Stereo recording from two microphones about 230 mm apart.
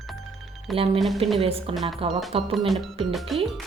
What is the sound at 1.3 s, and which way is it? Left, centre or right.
Speech, right.